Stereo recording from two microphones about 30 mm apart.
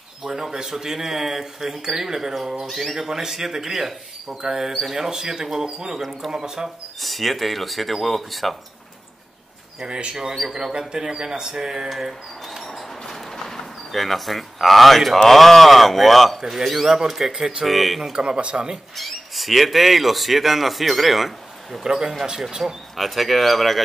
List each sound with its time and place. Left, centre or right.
0.2 s speech: centre
2.9 s speech: centre
7.0 s speech: centre
9.8 s speech: right
10.5 s speech: right
11.9 s speech: centre
12.4 s speech: centre
16.3 s speech: centre
16.6 s speech: centre
16.9 s speech: centre
17.6 s speech: centre
18.1 s speech: right
18.9 s speech: centre